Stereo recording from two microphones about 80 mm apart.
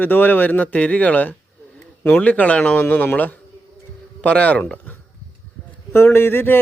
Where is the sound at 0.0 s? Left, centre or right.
Left.